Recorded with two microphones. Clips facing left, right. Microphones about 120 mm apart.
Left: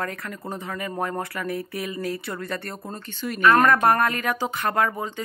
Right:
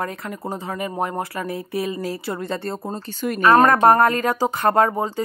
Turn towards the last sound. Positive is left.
turn(degrees=-35)  # may be behind; listen again after turning